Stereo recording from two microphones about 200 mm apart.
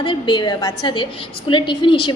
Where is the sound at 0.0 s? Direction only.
25° left (ahead or behind).